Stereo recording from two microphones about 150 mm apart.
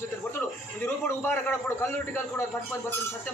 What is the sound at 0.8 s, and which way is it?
A man's voice, 15° left (ahead or behind).